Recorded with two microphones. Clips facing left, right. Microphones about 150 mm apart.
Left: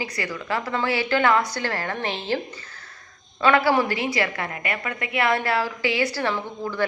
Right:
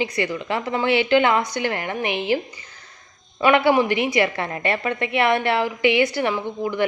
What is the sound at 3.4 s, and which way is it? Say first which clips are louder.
A woman's voice: right 3 dB; 20° right (ahead or behind).